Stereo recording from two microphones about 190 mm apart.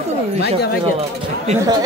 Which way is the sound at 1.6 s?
20° right (ahead or behind).